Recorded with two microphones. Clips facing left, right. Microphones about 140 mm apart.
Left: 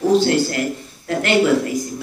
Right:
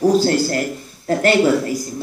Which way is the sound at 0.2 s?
40° right (ahead or behind).